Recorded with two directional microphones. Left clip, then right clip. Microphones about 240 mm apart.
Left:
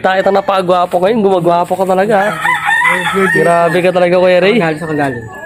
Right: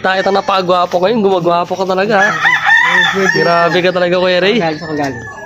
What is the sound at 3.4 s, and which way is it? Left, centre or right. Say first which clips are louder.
Speech: left 1 dB; centre.